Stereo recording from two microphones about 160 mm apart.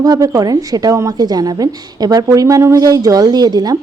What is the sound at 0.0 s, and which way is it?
A woman's voice, 20° right (ahead or behind).